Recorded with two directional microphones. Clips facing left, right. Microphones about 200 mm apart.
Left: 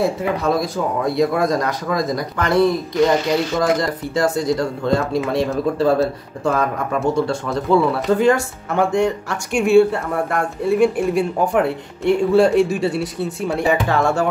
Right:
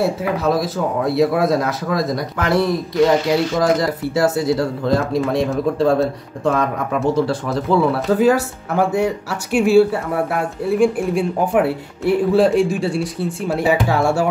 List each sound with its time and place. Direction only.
0.0 s a man's voice: centre (ahead or behind)